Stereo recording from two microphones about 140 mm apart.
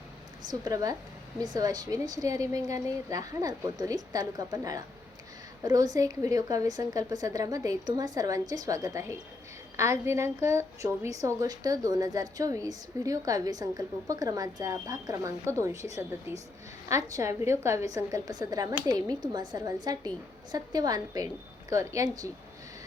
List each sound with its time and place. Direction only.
0.6 s a woman's voice: 25° right (ahead or behind)